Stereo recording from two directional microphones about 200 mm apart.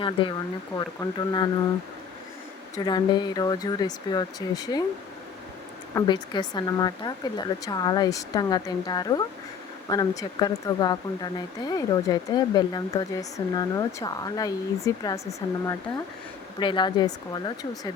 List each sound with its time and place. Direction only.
0.0 s speech: 25° left (ahead or behind)
2.7 s speech: 20° left (ahead or behind)
5.9 s speech: 20° left (ahead or behind)